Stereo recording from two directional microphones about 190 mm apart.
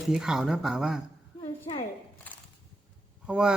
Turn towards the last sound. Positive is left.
turn(degrees=-5)  # may be behind; listen again after turning